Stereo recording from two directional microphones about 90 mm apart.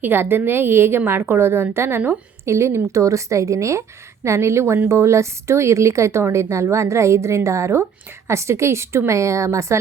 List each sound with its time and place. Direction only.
0.0 s a woman's voice: 25° right (ahead or behind)